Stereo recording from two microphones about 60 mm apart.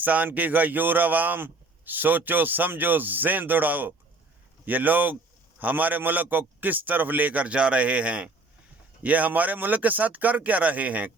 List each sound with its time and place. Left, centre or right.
0.0 s a man's voice: right